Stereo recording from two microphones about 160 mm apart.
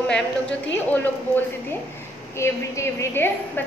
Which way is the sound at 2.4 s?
15° left (ahead or behind).